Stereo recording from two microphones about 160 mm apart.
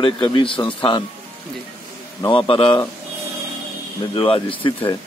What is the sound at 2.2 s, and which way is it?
Speech, 30° left (ahead or behind).